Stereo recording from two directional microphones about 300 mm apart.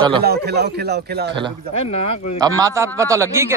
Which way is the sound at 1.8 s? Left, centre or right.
Centre.